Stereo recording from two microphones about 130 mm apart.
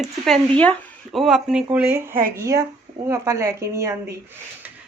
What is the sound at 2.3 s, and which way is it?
A woman's voice, 25° right (ahead or behind).